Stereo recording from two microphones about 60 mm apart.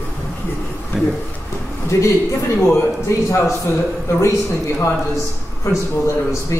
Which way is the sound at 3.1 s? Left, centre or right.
Left.